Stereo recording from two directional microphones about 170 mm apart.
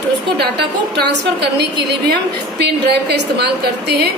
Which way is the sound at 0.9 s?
75° right (ahead or behind).